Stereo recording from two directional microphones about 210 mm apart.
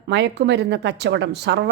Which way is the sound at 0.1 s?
55° right (ahead or behind).